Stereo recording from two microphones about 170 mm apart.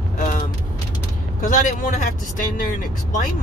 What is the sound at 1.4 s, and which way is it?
Speech, 50° left (ahead or behind).